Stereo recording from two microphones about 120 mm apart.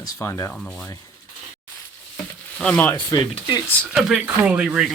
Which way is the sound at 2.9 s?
40° left (ahead or behind).